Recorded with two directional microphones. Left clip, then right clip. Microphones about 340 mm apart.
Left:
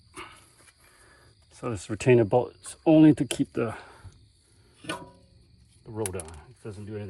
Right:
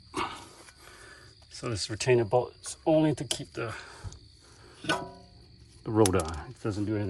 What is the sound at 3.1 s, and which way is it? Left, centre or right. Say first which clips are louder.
Speech: left 6 dB; centre.